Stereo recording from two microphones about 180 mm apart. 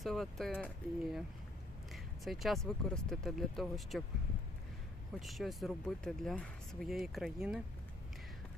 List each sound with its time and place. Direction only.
0.0 s speech: centre (ahead or behind)
5.2 s speech: centre (ahead or behind)